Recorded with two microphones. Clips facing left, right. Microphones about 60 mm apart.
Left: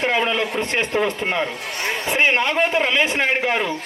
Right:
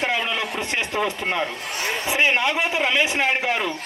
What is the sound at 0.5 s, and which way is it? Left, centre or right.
Speech, left.